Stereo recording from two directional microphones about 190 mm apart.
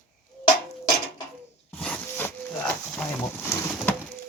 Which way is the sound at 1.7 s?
10° left (ahead or behind).